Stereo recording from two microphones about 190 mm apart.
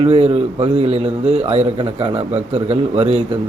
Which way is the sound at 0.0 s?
30° right (ahead or behind).